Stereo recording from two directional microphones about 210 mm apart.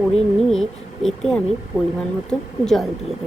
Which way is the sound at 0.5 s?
Centre (ahead or behind).